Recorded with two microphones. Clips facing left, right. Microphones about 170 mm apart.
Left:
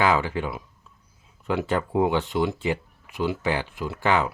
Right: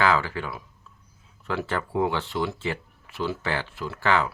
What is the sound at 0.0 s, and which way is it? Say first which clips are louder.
Speech: left 1 dB; 20° left (ahead or behind).